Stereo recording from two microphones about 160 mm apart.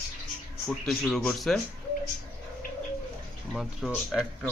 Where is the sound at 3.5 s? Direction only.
Centre (ahead or behind).